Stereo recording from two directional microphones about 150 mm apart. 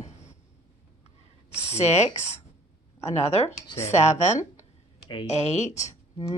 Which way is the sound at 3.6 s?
25° left (ahead or behind).